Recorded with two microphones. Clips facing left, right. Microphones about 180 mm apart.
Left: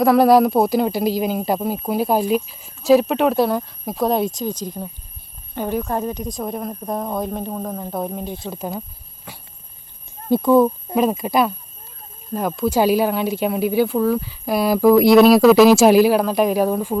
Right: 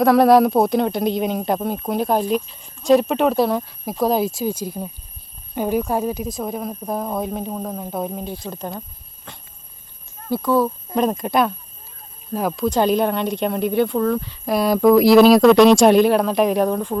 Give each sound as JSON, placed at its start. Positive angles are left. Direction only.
{"t": 0.0, "sound": "speech", "side_deg": 0}
{"t": 9.3, "sound": "a sound", "side_deg": 10}
{"t": 10.2, "sound": "speech", "side_deg": 20}
{"t": 10.9, "sound": "speech", "side_deg": 5}